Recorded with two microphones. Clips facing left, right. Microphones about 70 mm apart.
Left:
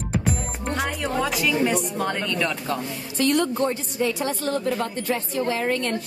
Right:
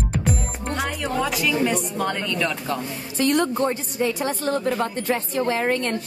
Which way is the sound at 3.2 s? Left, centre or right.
Right.